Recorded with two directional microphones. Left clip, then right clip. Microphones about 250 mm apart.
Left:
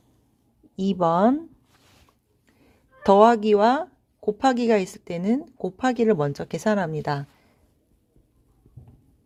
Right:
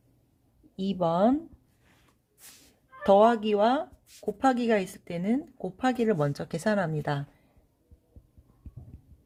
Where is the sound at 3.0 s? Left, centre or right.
Left.